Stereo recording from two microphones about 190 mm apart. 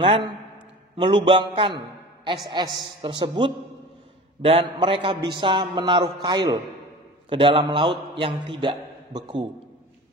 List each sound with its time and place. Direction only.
0.0 s a man's voice: 25° right (ahead or behind)